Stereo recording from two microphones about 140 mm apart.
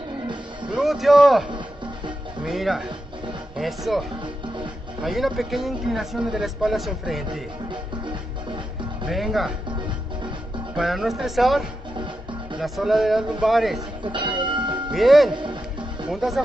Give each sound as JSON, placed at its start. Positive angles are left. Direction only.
{"t": 0.7, "sound": "speech", "side_deg": 0}
{"t": 2.4, "sound": "speech", "side_deg": 0}
{"t": 5.0, "sound": "speech", "side_deg": 0}
{"t": 7.7, "sound": "music", "side_deg": -40}
{"t": 9.0, "sound": "speech", "side_deg": 0}
{"t": 10.8, "sound": "speech", "side_deg": 0}
{"t": 14.0, "sound": "a sound", "side_deg": -35}
{"t": 14.9, "sound": "speech", "side_deg": 0}
{"t": 15.3, "sound": "music", "side_deg": -40}
{"t": 16.1, "sound": "speech", "side_deg": 0}